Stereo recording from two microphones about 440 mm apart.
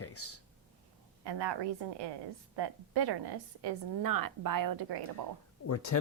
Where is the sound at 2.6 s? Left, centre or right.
Right.